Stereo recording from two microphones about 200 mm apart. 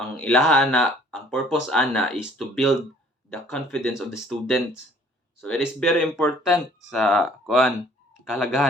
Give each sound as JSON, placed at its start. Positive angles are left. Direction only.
{"t": 0.1, "sound": "speech", "side_deg": 5}